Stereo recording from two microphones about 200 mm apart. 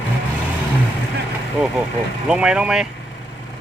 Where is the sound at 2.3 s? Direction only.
5° right (ahead or behind).